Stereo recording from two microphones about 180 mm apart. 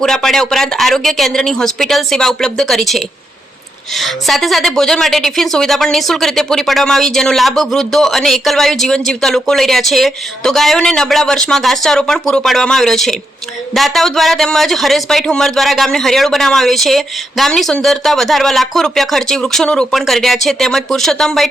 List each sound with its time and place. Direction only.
0.0 s a woman's voice: centre (ahead or behind)